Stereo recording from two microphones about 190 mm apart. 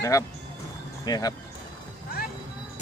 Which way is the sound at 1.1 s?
20° left (ahead or behind).